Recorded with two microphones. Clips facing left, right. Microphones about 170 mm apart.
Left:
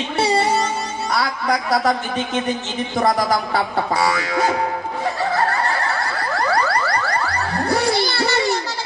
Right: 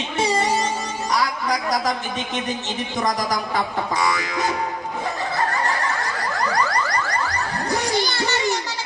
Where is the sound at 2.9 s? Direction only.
35° left (ahead or behind).